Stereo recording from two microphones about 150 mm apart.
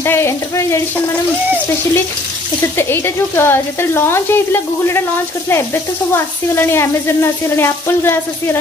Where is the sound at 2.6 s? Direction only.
15° left (ahead or behind).